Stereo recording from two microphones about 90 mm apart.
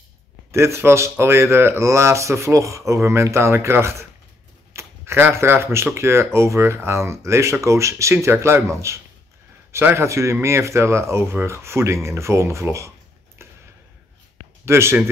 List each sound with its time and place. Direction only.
0.5 s speech: 30° right (ahead or behind)
13.4 s a sound: 30° right (ahead or behind)
14.6 s speech: 30° right (ahead or behind)